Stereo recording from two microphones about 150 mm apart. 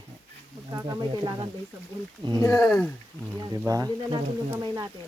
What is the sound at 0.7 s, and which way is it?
Speech, 25° right (ahead or behind).